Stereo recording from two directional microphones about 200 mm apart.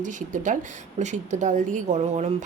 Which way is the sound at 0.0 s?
40° right (ahead or behind).